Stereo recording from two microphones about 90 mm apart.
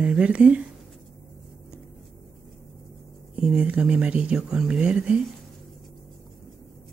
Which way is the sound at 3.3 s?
10° right (ahead or behind).